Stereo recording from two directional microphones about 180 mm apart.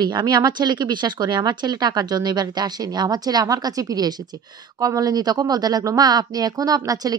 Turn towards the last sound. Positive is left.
turn(degrees=-20)  # may be behind; listen again after turning